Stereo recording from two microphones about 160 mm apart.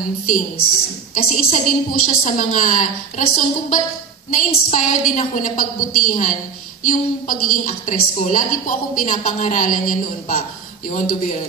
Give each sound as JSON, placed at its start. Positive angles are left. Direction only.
{"t": 1.1, "sound": "a woman's voice", "side_deg": 55}